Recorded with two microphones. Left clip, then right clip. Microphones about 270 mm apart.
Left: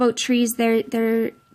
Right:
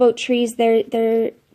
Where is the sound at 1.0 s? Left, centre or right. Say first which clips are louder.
Right 4 dB; left.